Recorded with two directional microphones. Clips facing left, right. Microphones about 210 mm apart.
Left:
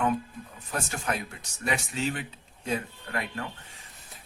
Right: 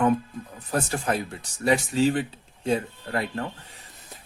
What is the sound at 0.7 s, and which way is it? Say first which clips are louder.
Speech: right 6 dB; 35° right (ahead or behind).